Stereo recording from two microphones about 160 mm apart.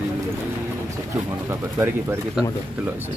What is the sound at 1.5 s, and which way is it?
Speech, 15° right (ahead or behind).